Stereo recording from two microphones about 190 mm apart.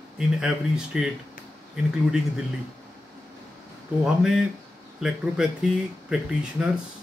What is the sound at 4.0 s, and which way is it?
Speech, 5° right (ahead or behind).